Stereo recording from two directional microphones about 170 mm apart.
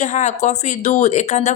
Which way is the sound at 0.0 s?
45° left (ahead or behind).